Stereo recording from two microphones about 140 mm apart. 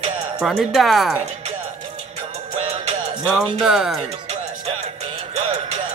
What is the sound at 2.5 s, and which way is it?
Music, 55° right (ahead or behind).